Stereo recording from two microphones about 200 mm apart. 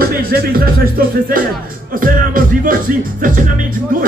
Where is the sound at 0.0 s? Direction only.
50° right (ahead or behind).